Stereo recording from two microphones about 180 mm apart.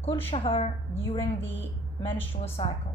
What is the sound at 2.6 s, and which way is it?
Speech, 25° left (ahead or behind).